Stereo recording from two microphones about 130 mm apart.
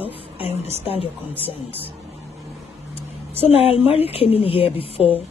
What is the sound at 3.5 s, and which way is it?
A woman's voice, 50° left (ahead or behind).